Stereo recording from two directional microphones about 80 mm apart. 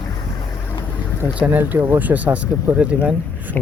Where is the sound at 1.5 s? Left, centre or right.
Right.